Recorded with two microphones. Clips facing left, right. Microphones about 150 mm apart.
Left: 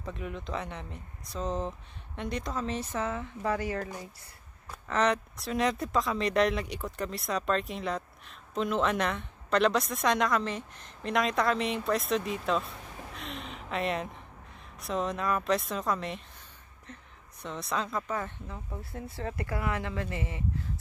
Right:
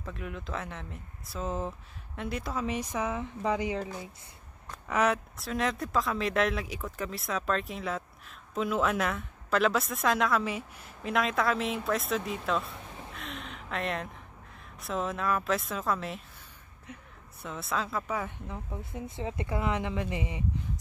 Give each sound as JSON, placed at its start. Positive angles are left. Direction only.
{"t": 0.0, "sound": "speech", "side_deg": 0}
{"t": 18.8, "sound": "speech", "side_deg": -20}